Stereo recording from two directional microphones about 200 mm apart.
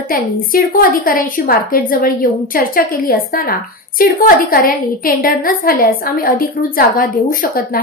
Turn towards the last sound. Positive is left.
turn(degrees=45)  # may be behind; listen again after turning